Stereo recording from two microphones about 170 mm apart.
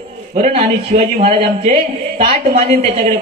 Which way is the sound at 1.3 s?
60° right (ahead or behind).